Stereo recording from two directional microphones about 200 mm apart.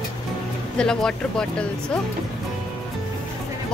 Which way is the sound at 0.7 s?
5° left (ahead or behind).